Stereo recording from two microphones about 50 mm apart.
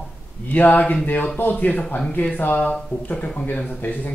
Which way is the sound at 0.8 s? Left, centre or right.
Left.